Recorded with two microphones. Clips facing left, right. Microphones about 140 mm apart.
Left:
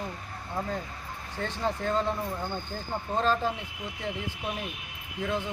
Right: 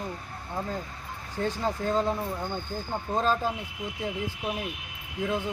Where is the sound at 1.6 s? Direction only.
5° right (ahead or behind).